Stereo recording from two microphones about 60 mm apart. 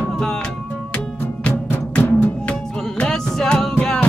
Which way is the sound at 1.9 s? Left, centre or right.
Left.